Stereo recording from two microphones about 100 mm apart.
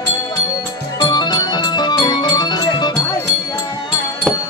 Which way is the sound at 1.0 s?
45° left (ahead or behind).